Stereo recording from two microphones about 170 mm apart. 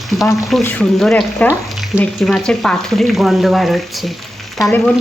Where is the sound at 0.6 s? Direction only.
10° left (ahead or behind).